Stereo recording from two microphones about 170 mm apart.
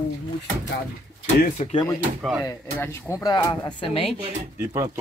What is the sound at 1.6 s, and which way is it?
Speech, 40° left (ahead or behind).